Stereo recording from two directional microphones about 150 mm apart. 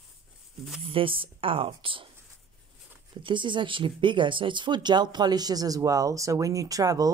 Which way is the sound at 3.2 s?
30° right (ahead or behind).